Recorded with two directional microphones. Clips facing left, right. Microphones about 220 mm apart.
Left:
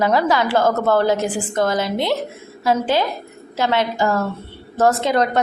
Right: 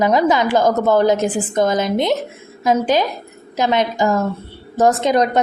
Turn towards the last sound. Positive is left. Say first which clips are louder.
# right 2 dB
turn(degrees=-15)  # may be behind; listen again after turning